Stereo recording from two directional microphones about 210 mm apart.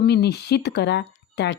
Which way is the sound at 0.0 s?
50° left (ahead or behind).